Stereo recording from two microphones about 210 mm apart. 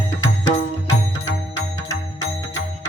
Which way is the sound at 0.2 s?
65° left (ahead or behind).